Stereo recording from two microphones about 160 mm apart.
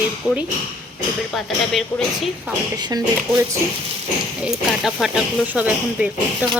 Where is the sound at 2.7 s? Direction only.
25° right (ahead or behind).